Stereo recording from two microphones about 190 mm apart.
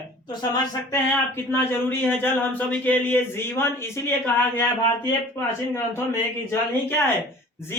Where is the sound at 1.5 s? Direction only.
10° left (ahead or behind).